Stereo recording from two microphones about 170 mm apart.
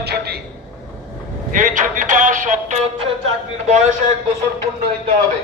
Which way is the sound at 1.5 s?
50° right (ahead or behind).